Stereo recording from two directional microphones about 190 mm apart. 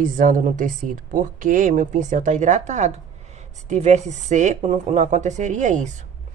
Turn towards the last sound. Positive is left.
turn(degrees=-40)  # may be behind; listen again after turning